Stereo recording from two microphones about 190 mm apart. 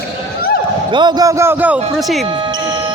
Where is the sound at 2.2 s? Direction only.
25° right (ahead or behind).